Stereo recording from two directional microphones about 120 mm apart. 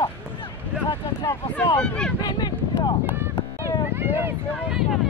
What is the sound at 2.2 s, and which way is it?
Speech, 35° left (ahead or behind).